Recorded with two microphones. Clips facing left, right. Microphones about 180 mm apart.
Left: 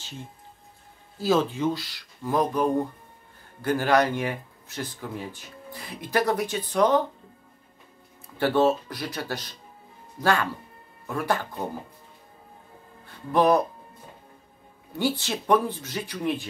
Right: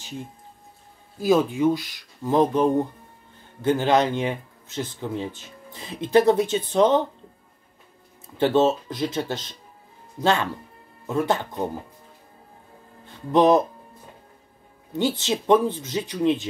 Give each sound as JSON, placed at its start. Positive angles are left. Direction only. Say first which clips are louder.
{"t": 1.2, "sound": "speech", "louder": "right 4 dB", "side_deg": -15}
{"t": 8.4, "sound": "speech", "louder": "right 2 dB", "side_deg": -20}
{"t": 13.0, "sound": "speech", "louder": "right 4 dB", "side_deg": -20}
{"t": 14.9, "sound": "speech", "louder": "right 3 dB", "side_deg": -20}